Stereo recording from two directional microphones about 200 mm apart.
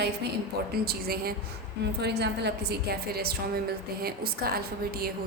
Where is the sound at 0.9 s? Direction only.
50° right (ahead or behind).